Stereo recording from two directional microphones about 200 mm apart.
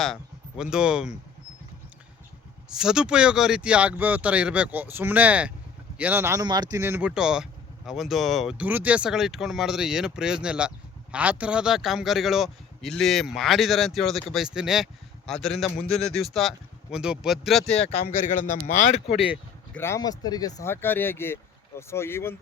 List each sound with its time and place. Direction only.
0.0 s speech: centre (ahead or behind)
2.6 s a man's voice: 5° right (ahead or behind)
18.7 s speech: 35° left (ahead or behind)
19.7 s speech: 10° left (ahead or behind)